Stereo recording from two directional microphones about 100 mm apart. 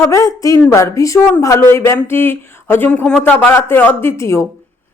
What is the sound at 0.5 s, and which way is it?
Speech, 20° left (ahead or behind).